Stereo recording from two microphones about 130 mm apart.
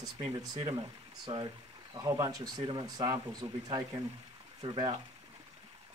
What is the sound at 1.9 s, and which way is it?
Speech, 25° right (ahead or behind).